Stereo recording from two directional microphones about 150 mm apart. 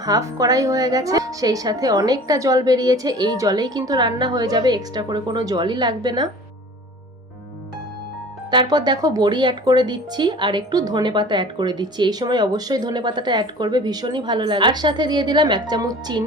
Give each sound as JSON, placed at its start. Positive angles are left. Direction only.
{"t": 0.0, "sound": "speech", "side_deg": -25}
{"t": 8.4, "sound": "speech", "side_deg": -30}